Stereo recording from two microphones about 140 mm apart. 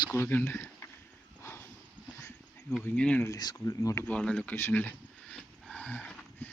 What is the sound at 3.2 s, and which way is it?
Speech, 25° left (ahead or behind).